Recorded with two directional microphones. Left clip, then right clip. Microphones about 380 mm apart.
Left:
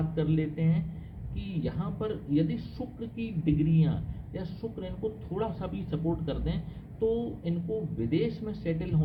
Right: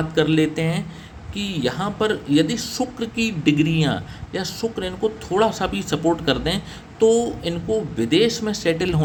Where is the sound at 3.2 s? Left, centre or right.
Right.